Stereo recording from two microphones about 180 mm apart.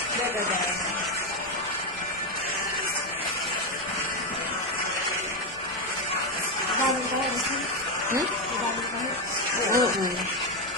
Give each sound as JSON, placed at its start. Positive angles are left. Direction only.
{"t": 9.7, "sound": "speech", "side_deg": -20}